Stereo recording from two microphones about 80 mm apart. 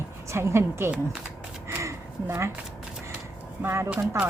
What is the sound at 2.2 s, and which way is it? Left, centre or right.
Speech, right.